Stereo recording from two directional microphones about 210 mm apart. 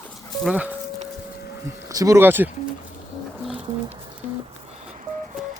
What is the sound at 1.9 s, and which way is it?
Speech, 15° right (ahead or behind).